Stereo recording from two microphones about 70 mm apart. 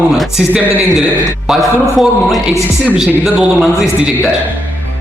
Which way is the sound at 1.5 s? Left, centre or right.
Centre.